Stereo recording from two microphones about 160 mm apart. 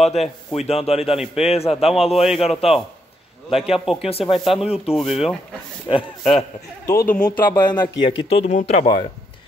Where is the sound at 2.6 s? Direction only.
40° left (ahead or behind).